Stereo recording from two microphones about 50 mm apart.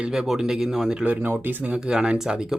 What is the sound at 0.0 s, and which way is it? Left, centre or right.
Speech, centre.